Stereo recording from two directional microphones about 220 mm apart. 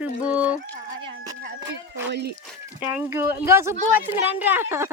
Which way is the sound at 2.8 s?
10° right (ahead or behind).